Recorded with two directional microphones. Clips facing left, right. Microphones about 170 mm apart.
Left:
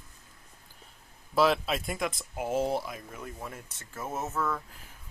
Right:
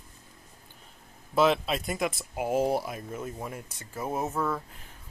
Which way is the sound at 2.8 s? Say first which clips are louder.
Right 5 dB; 20° right (ahead or behind).